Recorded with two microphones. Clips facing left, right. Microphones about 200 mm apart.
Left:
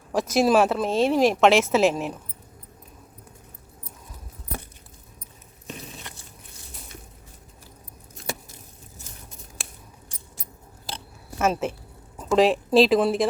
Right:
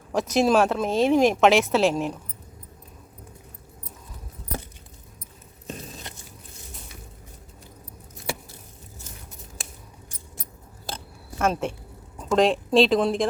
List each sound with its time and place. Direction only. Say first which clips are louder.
0.1 s speech: left 1 dB; centre (ahead or behind)
11.3 s a woman's voice: left 1 dB; 5° left (ahead or behind)